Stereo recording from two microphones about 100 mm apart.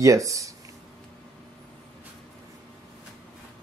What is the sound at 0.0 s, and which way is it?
Speech, 35° right (ahead or behind).